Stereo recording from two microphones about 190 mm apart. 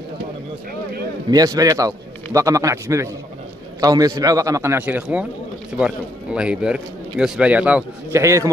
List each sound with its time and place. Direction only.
1.3 s a man's voice: 20° right (ahead or behind)